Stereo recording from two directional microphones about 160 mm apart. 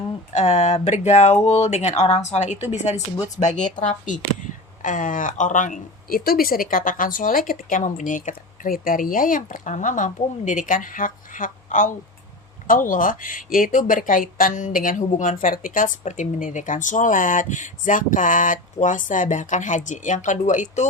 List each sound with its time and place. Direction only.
0.3 s speech: 45° left (ahead or behind)